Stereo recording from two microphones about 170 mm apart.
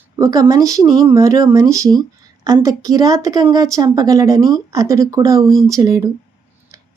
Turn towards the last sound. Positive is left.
turn(degrees=-20)  # may be behind; listen again after turning